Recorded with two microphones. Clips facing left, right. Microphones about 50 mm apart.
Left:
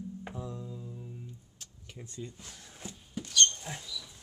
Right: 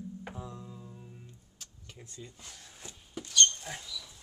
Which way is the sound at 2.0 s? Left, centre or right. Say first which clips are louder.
Left 6 dB; centre.